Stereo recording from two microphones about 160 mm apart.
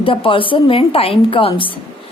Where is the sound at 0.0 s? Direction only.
35° left (ahead or behind).